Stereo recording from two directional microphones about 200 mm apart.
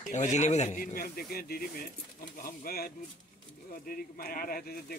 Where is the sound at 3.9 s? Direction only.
45° left (ahead or behind).